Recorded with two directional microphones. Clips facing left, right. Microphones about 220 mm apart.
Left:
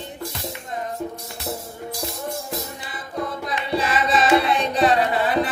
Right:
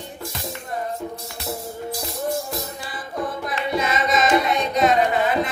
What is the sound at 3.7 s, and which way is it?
Music, 30° left (ahead or behind).